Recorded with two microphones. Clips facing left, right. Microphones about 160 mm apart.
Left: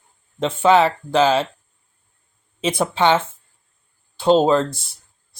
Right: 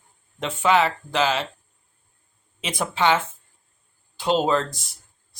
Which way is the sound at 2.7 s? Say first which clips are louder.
Left 3 dB; 30° left (ahead or behind).